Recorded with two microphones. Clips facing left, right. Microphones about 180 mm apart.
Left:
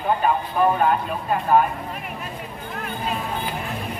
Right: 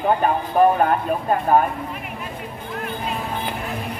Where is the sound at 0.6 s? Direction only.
45° right (ahead or behind).